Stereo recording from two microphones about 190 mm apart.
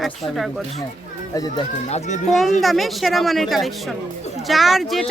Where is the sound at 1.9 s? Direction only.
35° left (ahead or behind).